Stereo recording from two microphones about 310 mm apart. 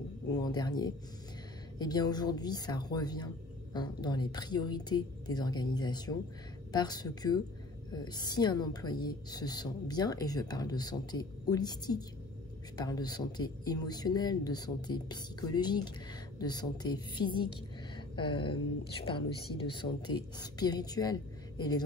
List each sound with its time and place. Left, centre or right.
0.3 s a woman's voice: centre